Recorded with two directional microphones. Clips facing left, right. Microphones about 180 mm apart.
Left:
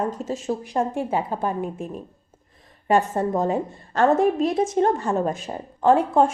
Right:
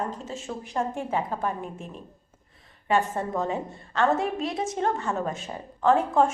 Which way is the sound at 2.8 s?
40° left (ahead or behind).